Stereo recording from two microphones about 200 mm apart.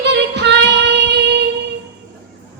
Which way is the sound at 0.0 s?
60° right (ahead or behind).